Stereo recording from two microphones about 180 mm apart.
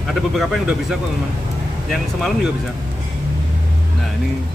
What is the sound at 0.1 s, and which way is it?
Speech, centre (ahead or behind).